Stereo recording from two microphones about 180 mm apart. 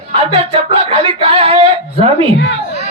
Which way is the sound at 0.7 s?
30° right (ahead or behind).